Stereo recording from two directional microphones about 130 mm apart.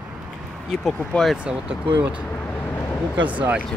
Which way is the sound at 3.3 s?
10° right (ahead or behind).